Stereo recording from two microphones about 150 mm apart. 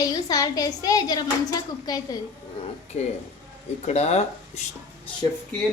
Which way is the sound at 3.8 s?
45° left (ahead or behind).